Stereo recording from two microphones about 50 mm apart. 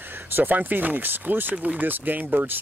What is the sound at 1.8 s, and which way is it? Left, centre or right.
Speech, right.